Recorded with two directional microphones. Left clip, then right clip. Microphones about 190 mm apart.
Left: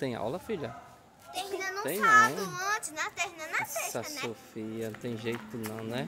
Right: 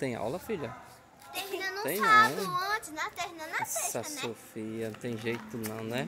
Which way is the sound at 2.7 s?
25° left (ahead or behind).